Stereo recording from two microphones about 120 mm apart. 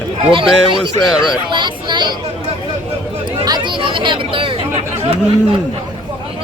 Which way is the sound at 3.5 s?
40° right (ahead or behind).